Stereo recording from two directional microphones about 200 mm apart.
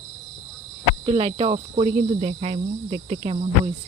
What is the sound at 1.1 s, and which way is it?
Speech, 30° right (ahead or behind).